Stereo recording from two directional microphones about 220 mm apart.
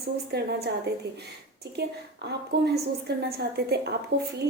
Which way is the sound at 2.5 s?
45° right (ahead or behind).